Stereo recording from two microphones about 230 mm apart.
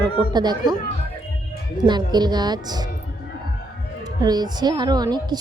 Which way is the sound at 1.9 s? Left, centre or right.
Centre.